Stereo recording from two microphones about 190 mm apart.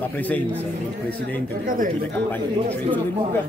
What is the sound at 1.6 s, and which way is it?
Speech, 45° right (ahead or behind).